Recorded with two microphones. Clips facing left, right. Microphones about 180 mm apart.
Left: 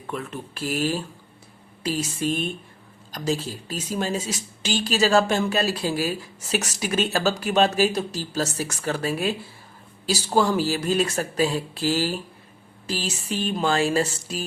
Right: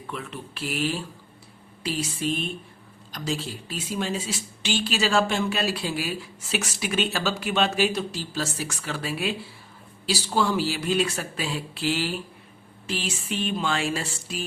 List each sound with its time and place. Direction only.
0.1 s speech: 45° left (ahead or behind)